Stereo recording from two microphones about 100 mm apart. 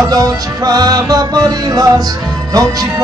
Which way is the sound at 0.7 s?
40° right (ahead or behind).